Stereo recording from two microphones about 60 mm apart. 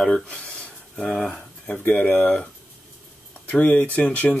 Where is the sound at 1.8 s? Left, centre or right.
Left.